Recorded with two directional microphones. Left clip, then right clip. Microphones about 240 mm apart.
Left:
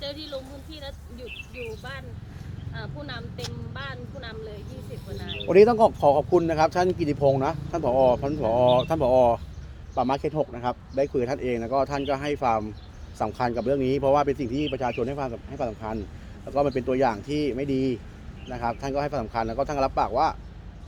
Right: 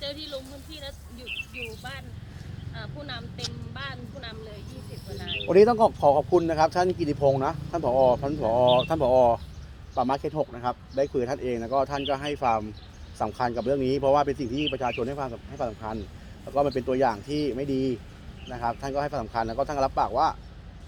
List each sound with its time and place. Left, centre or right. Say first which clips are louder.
0.0 s speech: left 1 dB; left
5.5 s speech: left 2 dB; centre